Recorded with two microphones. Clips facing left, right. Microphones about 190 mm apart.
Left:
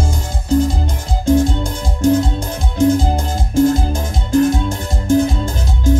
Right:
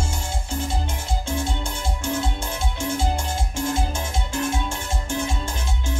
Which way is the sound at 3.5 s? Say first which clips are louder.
Left 14 dB; 35° left (ahead or behind).